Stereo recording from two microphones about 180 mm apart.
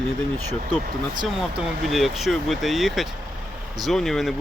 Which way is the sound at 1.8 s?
Centre (ahead or behind).